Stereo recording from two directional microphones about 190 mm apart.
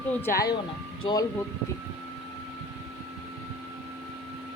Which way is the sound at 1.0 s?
20° left (ahead or behind).